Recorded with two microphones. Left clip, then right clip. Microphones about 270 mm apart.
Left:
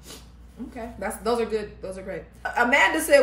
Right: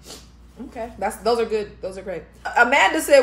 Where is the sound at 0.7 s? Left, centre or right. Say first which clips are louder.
Right 6 dB; centre.